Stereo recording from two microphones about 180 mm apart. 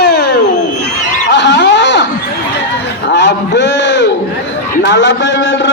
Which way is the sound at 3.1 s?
70° left (ahead or behind).